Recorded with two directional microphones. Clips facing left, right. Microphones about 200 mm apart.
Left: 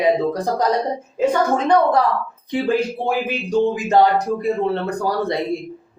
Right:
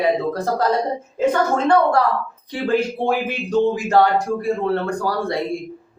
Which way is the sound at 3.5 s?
20° left (ahead or behind).